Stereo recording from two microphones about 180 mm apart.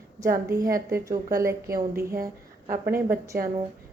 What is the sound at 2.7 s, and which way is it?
Speech, 55° right (ahead or behind).